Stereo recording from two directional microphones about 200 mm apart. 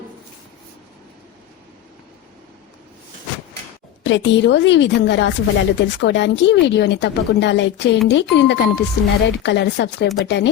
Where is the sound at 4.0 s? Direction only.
65° left (ahead or behind).